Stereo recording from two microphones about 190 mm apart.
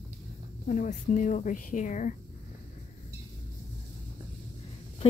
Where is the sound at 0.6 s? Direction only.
40° left (ahead or behind).